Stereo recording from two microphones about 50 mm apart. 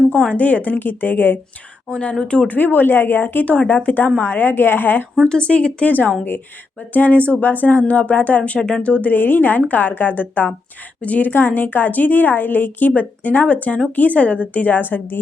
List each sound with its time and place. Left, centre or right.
0.1 s a woman's voice: left
1.9 s speech: left
2.6 s a woman's voice: left
5.2 s a woman's voice: centre
8.5 s speech: centre
8.8 s a woman's voice: left